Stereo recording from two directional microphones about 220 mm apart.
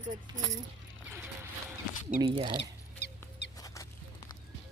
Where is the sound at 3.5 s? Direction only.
15° left (ahead or behind).